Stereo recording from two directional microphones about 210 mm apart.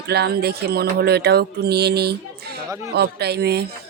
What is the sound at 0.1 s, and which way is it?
Speech, 50° right (ahead or behind).